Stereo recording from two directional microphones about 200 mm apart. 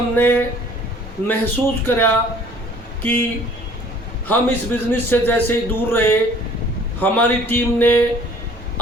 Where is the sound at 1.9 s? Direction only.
10° left (ahead or behind).